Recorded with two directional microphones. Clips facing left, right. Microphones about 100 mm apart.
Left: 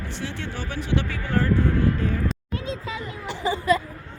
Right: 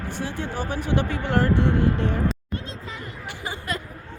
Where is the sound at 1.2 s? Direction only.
70° right (ahead or behind).